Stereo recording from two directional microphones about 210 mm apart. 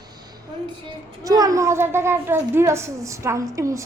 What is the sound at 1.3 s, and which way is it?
A child's voice, 15° right (ahead or behind).